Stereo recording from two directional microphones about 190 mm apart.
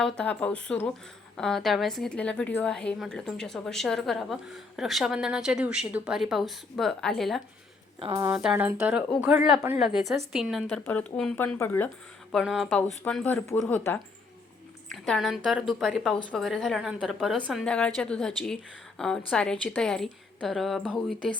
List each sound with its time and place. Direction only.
0.0 s a woman's voice: 5° left (ahead or behind)
7.9 s a woman's voice: 30° right (ahead or behind)
8.2 s a woman's voice: 5° right (ahead or behind); by 11.9 s 10° left (ahead or behind)
12.3 s a woman's voice: centre (ahead or behind)